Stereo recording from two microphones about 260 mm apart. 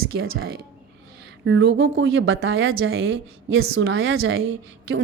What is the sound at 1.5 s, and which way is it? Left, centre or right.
Speech, right.